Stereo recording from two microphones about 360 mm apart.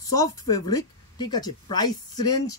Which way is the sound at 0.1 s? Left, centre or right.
Centre.